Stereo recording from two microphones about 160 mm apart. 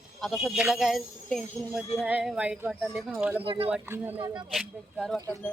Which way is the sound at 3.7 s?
10° right (ahead or behind).